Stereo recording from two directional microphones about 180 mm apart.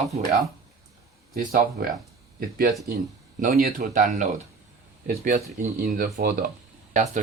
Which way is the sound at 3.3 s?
55° right (ahead or behind).